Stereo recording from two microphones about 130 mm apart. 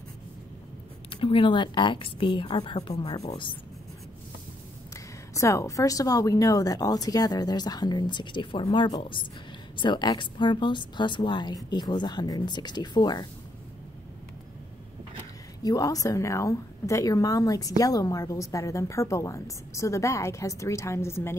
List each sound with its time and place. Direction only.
1.1 s speech: 40° left (ahead or behind)
5.4 s a woman's voice: 25° left (ahead or behind)
15.6 s a woman's voice: 30° left (ahead or behind)